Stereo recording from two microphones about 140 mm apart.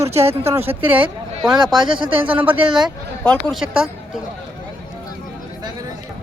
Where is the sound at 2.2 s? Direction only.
10° right (ahead or behind).